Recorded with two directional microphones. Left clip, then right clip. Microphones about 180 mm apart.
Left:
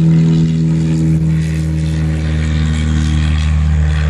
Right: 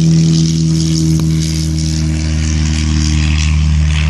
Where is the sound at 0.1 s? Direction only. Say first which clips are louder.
Right 1 dB; 45° left (ahead or behind).